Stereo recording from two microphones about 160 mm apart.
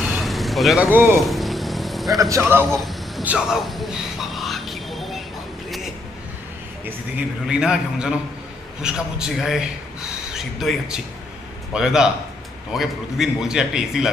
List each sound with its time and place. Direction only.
0.0 s vehicle: centre (ahead or behind)
0.9 s a man's voice: 15° right (ahead or behind)
1.2 s vehicle: centre (ahead or behind)
2.3 s a man's voice: 15° right (ahead or behind)
2.6 s a sound: centre (ahead or behind)
7.2 s a man's voice: 5° right (ahead or behind)